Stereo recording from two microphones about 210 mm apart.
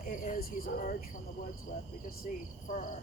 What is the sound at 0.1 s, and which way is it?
Speech, 45° left (ahead or behind).